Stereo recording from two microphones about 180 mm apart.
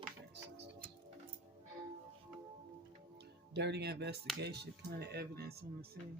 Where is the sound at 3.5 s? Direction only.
65° right (ahead or behind).